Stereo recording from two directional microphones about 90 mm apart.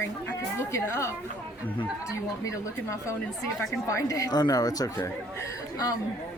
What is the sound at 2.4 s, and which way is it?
Speech, 35° left (ahead or behind).